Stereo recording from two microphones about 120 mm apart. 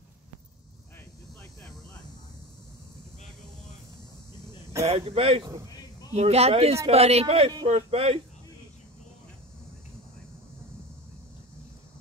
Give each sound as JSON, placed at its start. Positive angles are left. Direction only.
{"t": 4.8, "sound": "speech", "side_deg": -55}
{"t": 5.4, "sound": "a man's voice", "side_deg": -30}
{"t": 6.1, "sound": "speech", "side_deg": -60}